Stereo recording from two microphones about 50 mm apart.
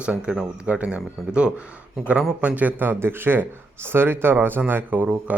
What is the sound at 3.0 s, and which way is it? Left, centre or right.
Speech, right.